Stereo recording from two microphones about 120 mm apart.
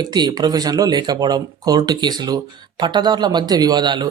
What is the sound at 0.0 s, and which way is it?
Speech, 35° right (ahead or behind).